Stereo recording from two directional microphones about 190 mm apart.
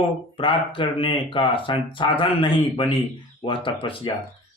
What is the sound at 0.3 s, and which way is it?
A man's voice, 25° left (ahead or behind).